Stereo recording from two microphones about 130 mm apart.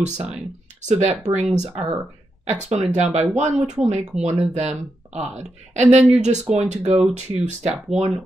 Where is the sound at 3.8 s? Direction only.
60° right (ahead or behind).